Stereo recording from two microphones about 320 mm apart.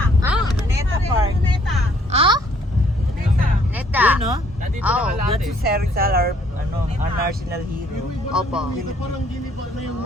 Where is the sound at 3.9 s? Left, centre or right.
Centre.